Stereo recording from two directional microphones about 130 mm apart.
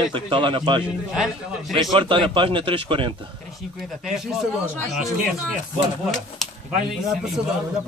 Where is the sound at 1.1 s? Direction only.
5° right (ahead or behind).